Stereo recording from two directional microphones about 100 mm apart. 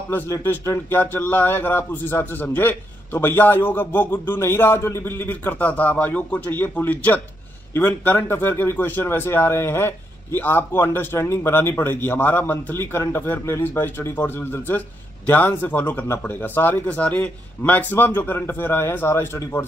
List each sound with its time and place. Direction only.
0.3 s speech: 30° left (ahead or behind)